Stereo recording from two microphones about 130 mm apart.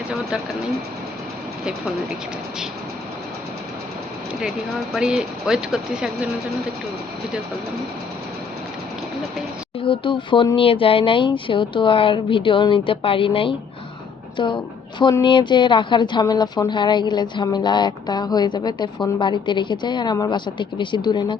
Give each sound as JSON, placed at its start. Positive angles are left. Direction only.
{"t": 4.9, "sound": "speech", "side_deg": -5}
{"t": 9.8, "sound": "a woman's voice", "side_deg": 40}